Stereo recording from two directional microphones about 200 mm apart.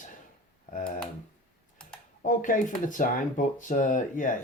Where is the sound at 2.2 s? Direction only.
40° left (ahead or behind).